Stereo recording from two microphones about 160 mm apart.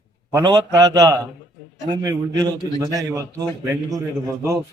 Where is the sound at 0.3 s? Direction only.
25° right (ahead or behind).